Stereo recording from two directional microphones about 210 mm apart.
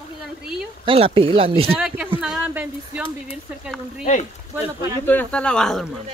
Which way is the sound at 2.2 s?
5° right (ahead or behind).